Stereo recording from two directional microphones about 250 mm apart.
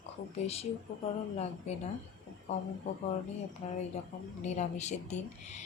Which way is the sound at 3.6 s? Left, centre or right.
Left.